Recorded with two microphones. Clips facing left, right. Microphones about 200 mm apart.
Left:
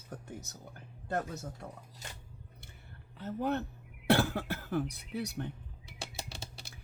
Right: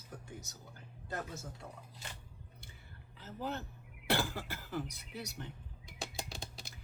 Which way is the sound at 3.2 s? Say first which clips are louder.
Left 8 dB; 60° left (ahead or behind).